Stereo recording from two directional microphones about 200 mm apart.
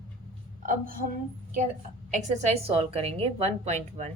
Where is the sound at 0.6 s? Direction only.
40° right (ahead or behind).